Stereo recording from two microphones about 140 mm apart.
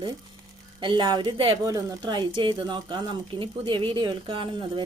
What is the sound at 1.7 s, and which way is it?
Speech, 25° right (ahead or behind).